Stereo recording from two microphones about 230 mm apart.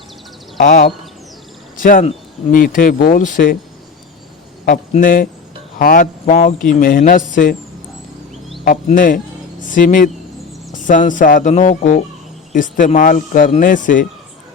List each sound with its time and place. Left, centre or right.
0.6 s speech: left
4.6 s speech: left
8.6 s speech: left